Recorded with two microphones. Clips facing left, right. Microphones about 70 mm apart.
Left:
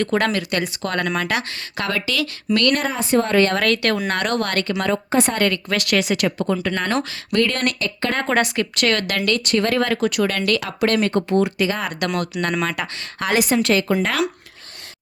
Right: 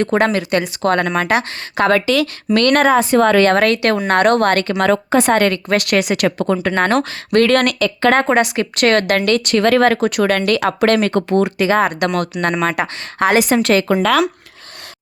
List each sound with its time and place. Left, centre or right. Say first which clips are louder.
0.0 s speech: right 4 dB; right
2.0 s speech: right 6 dB; right
3.6 s speech: right 5 dB; centre
3.9 s speech: right 8 dB; right
4.9 s a woman's voice: right 7 dB; right
5.4 s speech: right 5 dB; right
8.3 s speech: right 4 dB; centre
8.8 s speech: right 8 dB; right
9.4 s speech: right 7 dB; right
10.8 s speech: right 4 dB; right
11.5 s speech: right 8 dB; right
13.6 s speech: right 4 dB; right